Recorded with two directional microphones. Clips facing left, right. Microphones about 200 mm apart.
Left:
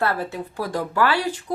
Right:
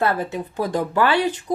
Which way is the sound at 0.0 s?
20° right (ahead or behind).